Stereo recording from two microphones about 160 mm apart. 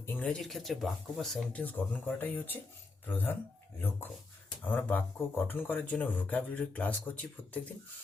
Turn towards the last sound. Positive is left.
turn(degrees=10)  # may be behind; listen again after turning